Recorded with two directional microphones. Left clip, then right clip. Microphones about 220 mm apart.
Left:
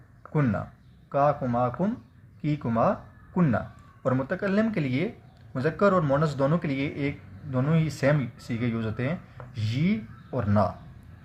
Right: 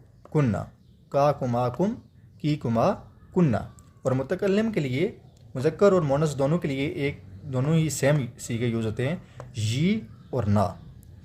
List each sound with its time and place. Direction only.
0.3 s speech: 40° right (ahead or behind)